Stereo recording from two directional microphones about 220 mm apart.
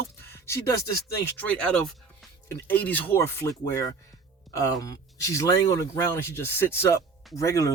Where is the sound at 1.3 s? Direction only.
5° left (ahead or behind).